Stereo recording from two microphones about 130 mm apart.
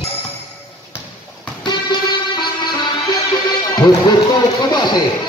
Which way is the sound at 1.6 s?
35° left (ahead or behind).